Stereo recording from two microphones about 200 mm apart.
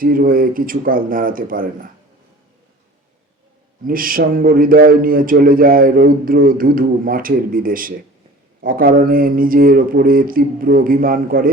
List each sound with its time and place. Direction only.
0.0 s a man's voice: 45° right (ahead or behind)
3.8 s a man's voice: 45° right (ahead or behind)